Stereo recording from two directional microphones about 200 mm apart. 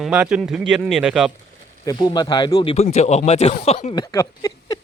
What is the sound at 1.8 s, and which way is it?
Speech, 20° left (ahead or behind).